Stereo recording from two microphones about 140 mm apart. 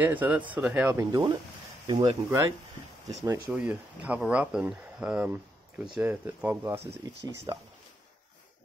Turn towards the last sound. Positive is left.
turn(degrees=-30)  # may be behind; listen again after turning